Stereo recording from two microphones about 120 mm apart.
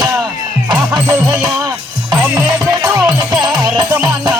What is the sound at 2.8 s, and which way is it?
Music, 30° right (ahead or behind).